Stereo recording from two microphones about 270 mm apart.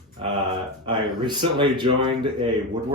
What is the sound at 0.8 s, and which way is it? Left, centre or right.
A man's voice, centre.